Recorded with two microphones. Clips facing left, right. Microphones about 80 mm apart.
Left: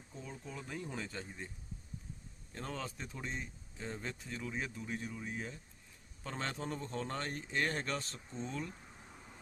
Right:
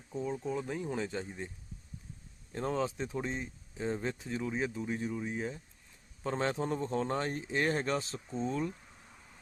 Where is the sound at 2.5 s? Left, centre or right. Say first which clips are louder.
Right 10 dB; right.